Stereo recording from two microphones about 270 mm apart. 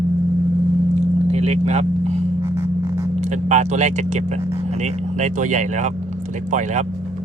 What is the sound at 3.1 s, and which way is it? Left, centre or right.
Speech, right.